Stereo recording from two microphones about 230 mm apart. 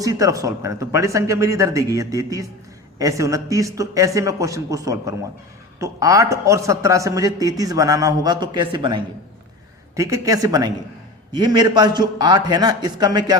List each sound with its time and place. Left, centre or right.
0.0 s a man's voice: centre